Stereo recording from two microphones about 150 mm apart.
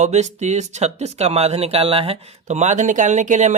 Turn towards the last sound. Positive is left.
turn(degrees=-50)  # may be behind; listen again after turning